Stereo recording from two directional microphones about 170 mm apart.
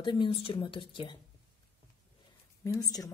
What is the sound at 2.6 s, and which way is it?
Speech, 20° left (ahead or behind).